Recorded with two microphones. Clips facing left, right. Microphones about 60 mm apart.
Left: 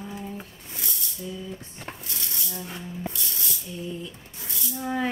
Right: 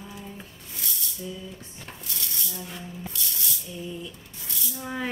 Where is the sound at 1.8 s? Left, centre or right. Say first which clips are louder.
Left 2 dB; left.